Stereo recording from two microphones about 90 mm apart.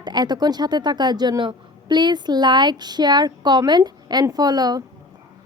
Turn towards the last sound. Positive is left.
turn(degrees=-45)  # may be behind; listen again after turning